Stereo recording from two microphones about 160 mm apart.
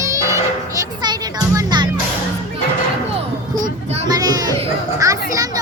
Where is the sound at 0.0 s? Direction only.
20° right (ahead or behind).